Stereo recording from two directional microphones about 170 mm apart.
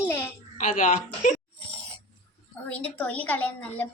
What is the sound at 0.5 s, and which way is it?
Speech, 45° left (ahead or behind).